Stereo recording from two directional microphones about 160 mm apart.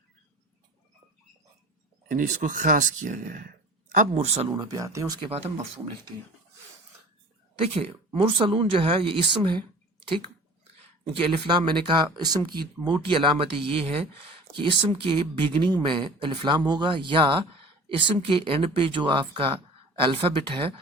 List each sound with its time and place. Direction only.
2.0 s speech: 50° right (ahead or behind)
4.4 s speech: 25° right (ahead or behind)
5.3 s speech: 40° right (ahead or behind)
7.6 s speech: 35° right (ahead or behind)
11.2 s speech: 30° right (ahead or behind)